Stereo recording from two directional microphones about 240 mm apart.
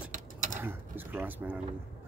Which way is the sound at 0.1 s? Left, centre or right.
Right.